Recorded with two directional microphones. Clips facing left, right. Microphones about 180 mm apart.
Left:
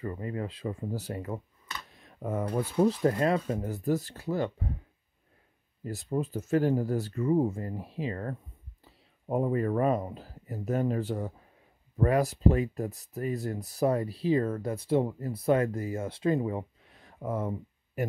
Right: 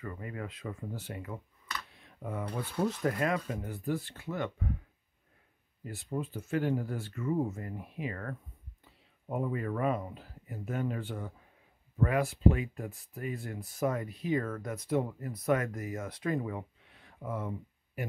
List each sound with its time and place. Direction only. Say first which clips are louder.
0.0 s speech: left 6 dB; 30° left (ahead or behind)
1.9 s a sound: left 6 dB; 40° left (ahead or behind)
2.9 s speech: left 5 dB; 30° left (ahead or behind)
5.9 s speech: left 5 dB; 40° left (ahead or behind)